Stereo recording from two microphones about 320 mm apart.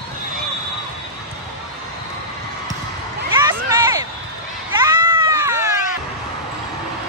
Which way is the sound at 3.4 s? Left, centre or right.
Centre.